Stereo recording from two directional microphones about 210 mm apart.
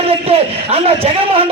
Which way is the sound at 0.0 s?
25° right (ahead or behind).